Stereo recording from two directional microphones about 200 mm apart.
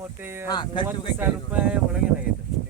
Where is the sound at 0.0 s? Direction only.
10° right (ahead or behind).